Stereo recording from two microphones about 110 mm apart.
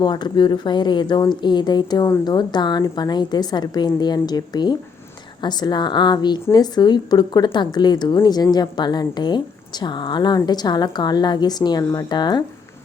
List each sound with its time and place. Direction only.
0.0 s a woman's voice: 40° left (ahead or behind)